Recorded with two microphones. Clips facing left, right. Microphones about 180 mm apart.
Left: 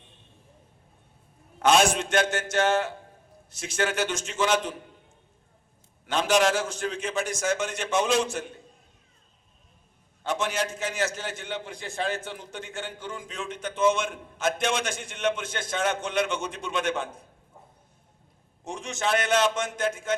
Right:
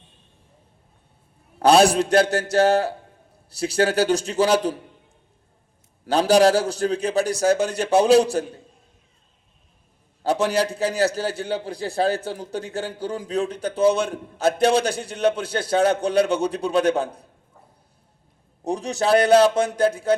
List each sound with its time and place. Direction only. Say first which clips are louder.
1.5 s a man's voice: right 6 dB; 35° right (ahead or behind)
6.1 s a man's voice: right 7 dB; 35° right (ahead or behind)
10.2 s a man's voice: right 8 dB; 35° right (ahead or behind)
18.6 s a man's voice: right 7 dB; 35° right (ahead or behind)